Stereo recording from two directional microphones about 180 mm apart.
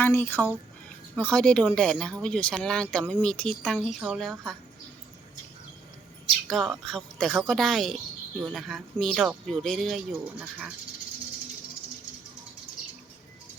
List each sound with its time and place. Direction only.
0.0 s speech: 10° left (ahead or behind)
6.5 s speech: centre (ahead or behind)